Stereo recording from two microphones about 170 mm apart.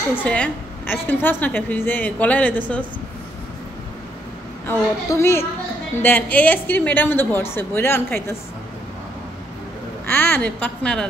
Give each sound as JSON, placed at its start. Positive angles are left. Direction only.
{"t": 0.1, "sound": "a woman's voice", "side_deg": 10}
{"t": 4.6, "sound": "a woman's voice", "side_deg": 15}
{"t": 10.0, "sound": "a woman's voice", "side_deg": 10}